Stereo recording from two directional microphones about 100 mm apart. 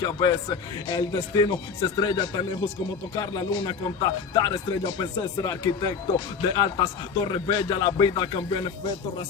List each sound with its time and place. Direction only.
0.0 s speech: 40° left (ahead or behind)